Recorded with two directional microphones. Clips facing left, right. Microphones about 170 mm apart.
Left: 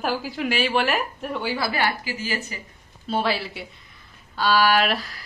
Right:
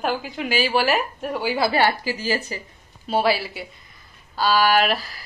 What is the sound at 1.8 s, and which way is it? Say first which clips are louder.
Speech: right 5 dB; 35° right (ahead or behind).